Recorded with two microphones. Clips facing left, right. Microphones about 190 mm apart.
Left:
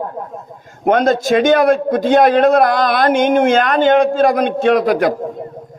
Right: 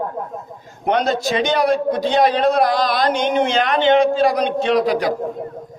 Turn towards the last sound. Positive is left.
turn(degrees=55)  # may be behind; listen again after turning